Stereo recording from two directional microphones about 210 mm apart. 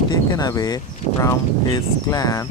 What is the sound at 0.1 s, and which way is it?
Speech, 20° left (ahead or behind).